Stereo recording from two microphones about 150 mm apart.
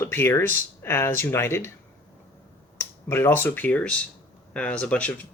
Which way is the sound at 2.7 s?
15° left (ahead or behind).